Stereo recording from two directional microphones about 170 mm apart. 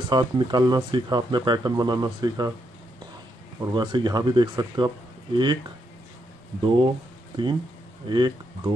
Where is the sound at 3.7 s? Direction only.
25° right (ahead or behind).